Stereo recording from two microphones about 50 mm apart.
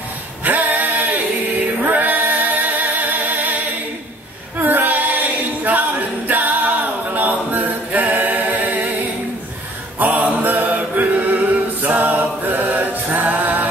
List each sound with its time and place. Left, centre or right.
0.4 s male singing: right
1.8 s singing: right
4.6 s a capella: right
9.9 s music: right